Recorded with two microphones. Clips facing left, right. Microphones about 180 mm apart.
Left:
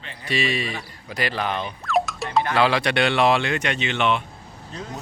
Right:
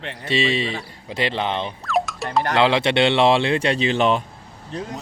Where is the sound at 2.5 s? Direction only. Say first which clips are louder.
Right 4 dB; 25° right (ahead or behind).